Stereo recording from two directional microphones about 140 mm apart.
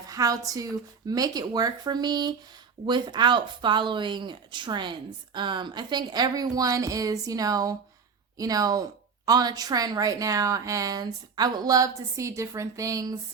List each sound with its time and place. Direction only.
0.1 s a woman's voice: 25° right (ahead or behind)